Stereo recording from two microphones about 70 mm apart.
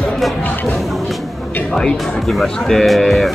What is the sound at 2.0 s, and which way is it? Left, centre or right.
Speech, centre.